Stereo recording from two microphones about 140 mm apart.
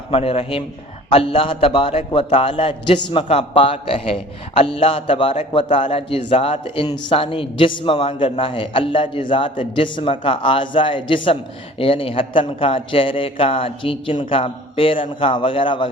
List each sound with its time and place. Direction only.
0.1 s a man's voice: 45° left (ahead or behind)
6.8 s a man's voice: 30° left (ahead or behind)